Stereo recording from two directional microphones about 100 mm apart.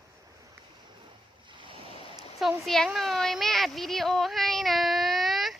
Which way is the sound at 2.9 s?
5° left (ahead or behind).